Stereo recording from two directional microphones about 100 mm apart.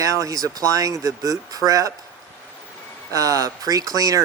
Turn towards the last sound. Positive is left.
turn(degrees=-35)  # may be behind; listen again after turning